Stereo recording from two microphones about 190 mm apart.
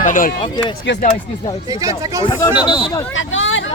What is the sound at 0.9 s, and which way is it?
Speech, 65° left (ahead or behind).